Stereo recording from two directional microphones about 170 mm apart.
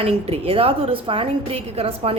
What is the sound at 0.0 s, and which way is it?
Speech, 35° right (ahead or behind).